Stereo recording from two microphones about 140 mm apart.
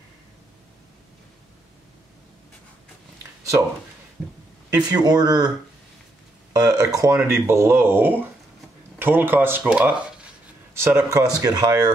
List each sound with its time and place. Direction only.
4.6 s speech: 25° right (ahead or behind)
6.6 s speech: 25° right (ahead or behind)